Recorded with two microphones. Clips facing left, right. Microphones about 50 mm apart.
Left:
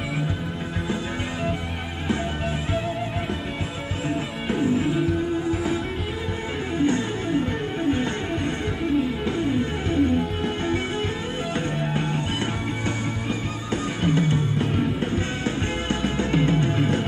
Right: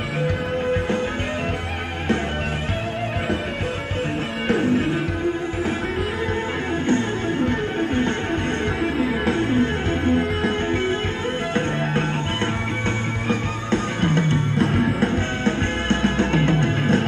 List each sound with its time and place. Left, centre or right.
4.7 s music: right
8.6 s music: right
12.8 s music: right
14.6 s music: right
15.4 s music: right